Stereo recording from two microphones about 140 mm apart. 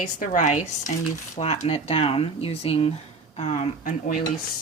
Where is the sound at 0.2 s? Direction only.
60° left (ahead or behind).